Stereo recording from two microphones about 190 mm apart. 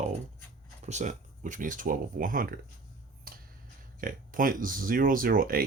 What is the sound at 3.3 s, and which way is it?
Tick-tock, 50° right (ahead or behind).